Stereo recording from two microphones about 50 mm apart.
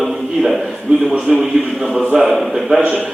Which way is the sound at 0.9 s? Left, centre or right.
Centre.